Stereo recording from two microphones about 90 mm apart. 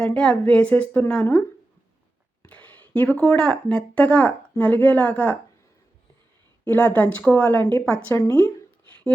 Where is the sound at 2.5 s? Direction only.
15° left (ahead or behind).